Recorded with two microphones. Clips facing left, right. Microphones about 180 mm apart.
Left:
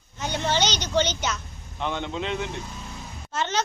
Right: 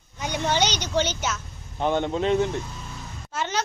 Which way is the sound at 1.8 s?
40° right (ahead or behind).